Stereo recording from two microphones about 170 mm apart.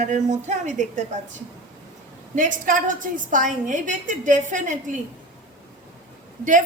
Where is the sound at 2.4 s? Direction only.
50° right (ahead or behind).